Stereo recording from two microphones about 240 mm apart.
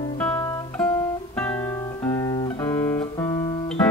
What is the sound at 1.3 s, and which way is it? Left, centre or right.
Guitar, centre.